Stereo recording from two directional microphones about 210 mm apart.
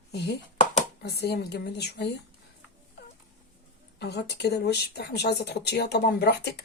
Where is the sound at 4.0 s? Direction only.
50° left (ahead or behind).